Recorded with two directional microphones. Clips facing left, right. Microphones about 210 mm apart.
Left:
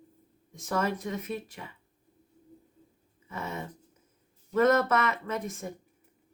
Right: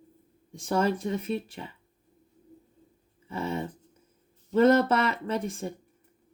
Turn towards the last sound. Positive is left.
turn(degrees=-30)  # may be behind; listen again after turning